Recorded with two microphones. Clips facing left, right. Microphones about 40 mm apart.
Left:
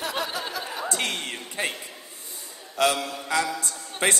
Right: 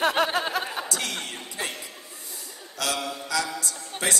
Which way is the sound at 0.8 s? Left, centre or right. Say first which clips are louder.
Left 3 dB; left.